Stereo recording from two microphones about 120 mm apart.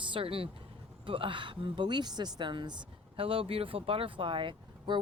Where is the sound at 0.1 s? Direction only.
50° right (ahead or behind).